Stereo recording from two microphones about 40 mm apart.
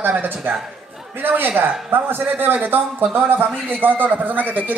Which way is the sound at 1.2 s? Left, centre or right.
Right.